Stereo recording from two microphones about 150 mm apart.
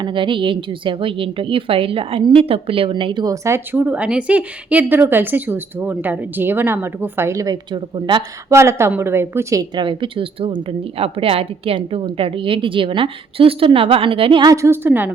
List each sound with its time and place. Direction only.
0.0 s a woman's voice: 35° right (ahead or behind)
3.4 s a woman's voice: 15° right (ahead or behind); by 8.5 s 30° right (ahead or behind)
8.5 s a woman's voice: 20° right (ahead or behind); by 14.5 s 35° right (ahead or behind)
14.5 s a woman's voice: 15° right (ahead or behind)